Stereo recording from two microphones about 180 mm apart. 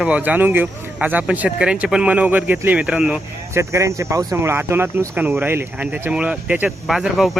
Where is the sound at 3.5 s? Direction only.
15° right (ahead or behind).